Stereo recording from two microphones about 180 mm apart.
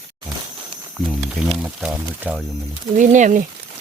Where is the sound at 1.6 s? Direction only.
5° right (ahead or behind).